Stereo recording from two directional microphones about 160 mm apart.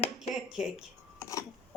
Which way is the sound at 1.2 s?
20° left (ahead or behind).